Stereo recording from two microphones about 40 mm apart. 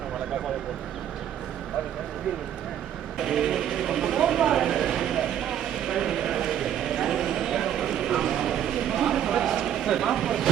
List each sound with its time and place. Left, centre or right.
3.2 s vehicle: centre
7.9 s clip-clop: centre
8.4 s a sound: centre
9.8 s vehicle: centre